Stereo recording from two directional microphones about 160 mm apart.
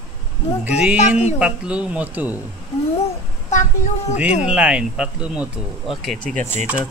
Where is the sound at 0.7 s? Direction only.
10° right (ahead or behind).